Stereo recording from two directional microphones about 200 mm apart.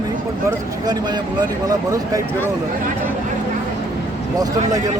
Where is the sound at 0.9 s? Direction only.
20° right (ahead or behind).